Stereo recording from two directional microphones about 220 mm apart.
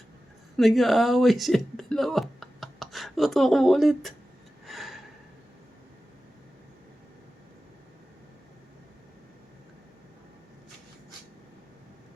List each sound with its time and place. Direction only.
0.5 s speech: centre (ahead or behind)
4.6 s gasp: centre (ahead or behind)